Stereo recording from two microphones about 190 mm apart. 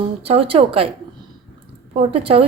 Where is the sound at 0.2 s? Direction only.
30° right (ahead or behind).